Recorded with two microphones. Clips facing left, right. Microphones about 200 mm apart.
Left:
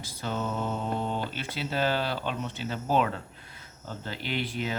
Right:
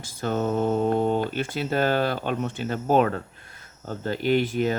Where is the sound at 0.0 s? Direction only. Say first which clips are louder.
Right 7 dB; 50° right (ahead or behind).